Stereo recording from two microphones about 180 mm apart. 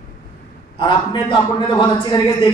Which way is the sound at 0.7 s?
25° left (ahead or behind).